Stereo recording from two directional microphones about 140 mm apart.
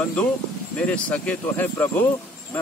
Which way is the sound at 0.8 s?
10° left (ahead or behind).